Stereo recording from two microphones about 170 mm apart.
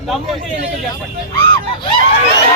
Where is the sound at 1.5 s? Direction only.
30° left (ahead or behind).